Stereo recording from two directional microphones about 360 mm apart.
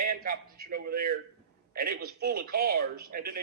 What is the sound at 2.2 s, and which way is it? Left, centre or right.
A man's voice, right.